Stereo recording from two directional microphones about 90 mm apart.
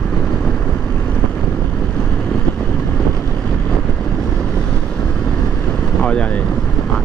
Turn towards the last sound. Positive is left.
turn(degrees=10)  # may be behind; listen again after turning